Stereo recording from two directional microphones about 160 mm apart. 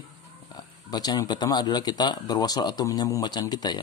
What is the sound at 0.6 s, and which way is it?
Mantra, 25° left (ahead or behind).